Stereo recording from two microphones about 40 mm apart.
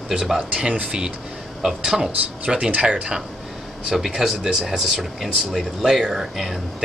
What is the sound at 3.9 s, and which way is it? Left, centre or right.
Speech, centre.